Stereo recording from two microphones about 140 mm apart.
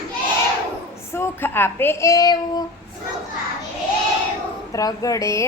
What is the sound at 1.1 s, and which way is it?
A child's voice, 15° left (ahead or behind).